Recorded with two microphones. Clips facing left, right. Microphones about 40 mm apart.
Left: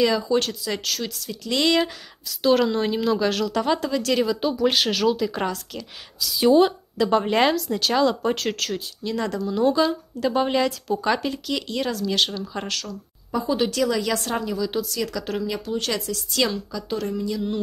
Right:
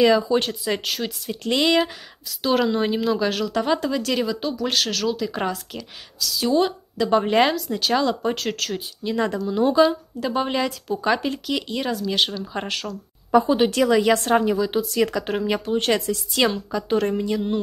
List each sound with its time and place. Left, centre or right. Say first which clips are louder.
0.0 s speech: right 3 dB; centre
6.1 s a woman's voice: left 4 dB; centre
6.6 s speech: left 2 dB; centre
8.7 s speech: right 3 dB; centre
12.5 s a woman's voice: right 2 dB; right